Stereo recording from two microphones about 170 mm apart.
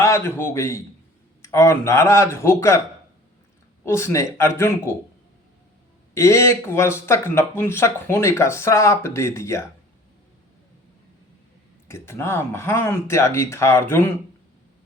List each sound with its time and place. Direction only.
0.0 s speech: 15° left (ahead or behind)
3.8 s speech: 15° left (ahead or behind)
6.1 s speech: 15° left (ahead or behind)
11.9 s speech: 15° left (ahead or behind)